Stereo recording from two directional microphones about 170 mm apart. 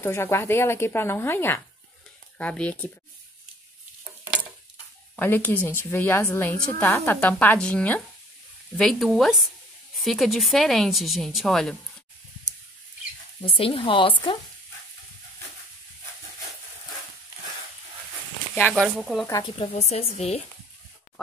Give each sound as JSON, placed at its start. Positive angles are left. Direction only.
{"t": 0.0, "sound": "speech", "side_deg": 15}
{"t": 5.1, "sound": "a woman's voice", "side_deg": 10}
{"t": 13.5, "sound": "a woman's voice", "side_deg": 30}
{"t": 18.5, "sound": "a woman's voice", "side_deg": 10}
{"t": 19.6, "sound": "a woman's voice", "side_deg": 40}